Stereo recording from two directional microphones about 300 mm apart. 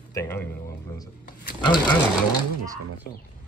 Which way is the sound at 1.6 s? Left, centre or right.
Centre.